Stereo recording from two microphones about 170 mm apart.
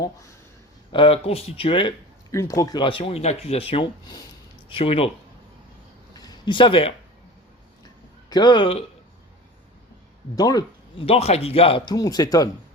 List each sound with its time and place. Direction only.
0.9 s speech: 35° left (ahead or behind)
2.3 s speech: 20° left (ahead or behind)
4.7 s speech: 35° left (ahead or behind)
6.1 s a sound: 25° left (ahead or behind)
8.3 s speech: 25° left (ahead or behind)
10.3 s speech: 20° left (ahead or behind)
11.0 s speech: 35° left (ahead or behind)
11.9 s speech: 20° left (ahead or behind)